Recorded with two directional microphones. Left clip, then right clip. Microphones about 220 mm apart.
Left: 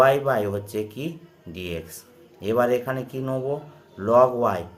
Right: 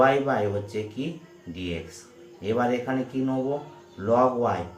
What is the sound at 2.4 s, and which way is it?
Speech, 55° left (ahead or behind).